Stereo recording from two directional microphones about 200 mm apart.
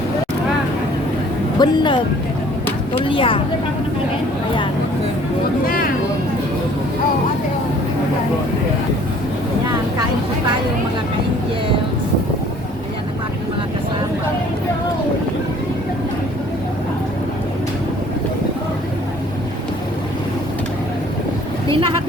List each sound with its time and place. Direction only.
1.5 s speech: 20° left (ahead or behind)
5.6 s speech: 45° left (ahead or behind)